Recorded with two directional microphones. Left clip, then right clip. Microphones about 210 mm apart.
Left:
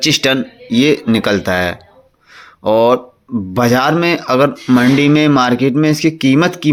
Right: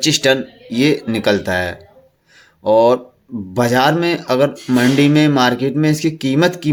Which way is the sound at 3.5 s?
15° left (ahead or behind).